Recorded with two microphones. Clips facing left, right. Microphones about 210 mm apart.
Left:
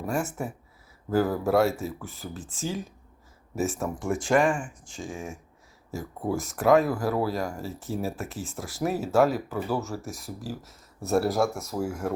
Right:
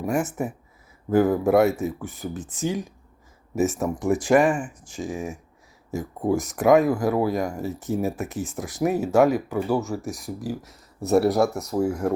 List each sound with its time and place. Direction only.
0.0 s speech: 15° right (ahead or behind)
11.8 s speech: 65° right (ahead or behind)